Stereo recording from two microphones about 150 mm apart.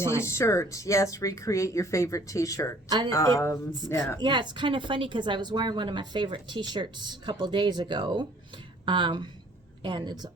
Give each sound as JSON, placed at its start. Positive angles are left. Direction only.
{"t": 0.0, "sound": "speech", "side_deg": 15}
{"t": 4.2, "sound": "a woman's voice", "side_deg": -30}